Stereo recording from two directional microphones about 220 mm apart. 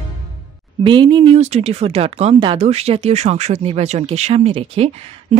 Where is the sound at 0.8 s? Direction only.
20° right (ahead or behind).